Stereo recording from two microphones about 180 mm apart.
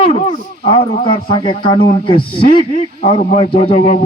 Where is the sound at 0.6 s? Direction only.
35° left (ahead or behind).